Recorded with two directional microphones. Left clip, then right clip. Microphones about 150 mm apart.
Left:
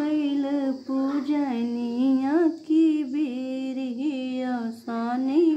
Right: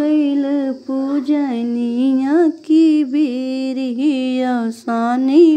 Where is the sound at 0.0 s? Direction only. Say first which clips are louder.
Right 9 dB; 35° right (ahead or behind).